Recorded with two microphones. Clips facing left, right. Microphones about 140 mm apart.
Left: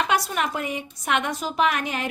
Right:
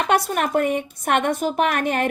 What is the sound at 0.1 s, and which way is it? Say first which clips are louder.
A woman's voice: right 5 dB; 50° right (ahead or behind).